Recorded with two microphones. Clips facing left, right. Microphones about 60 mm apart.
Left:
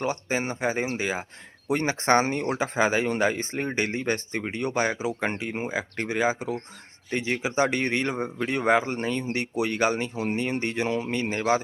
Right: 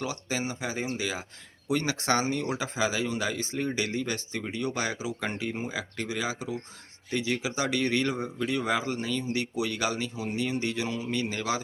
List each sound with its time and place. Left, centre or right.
0.0 s speech: left
5.4 s speech: left